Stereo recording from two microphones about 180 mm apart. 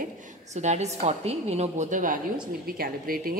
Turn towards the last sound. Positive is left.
turn(degrees=-55)  # may be behind; listen again after turning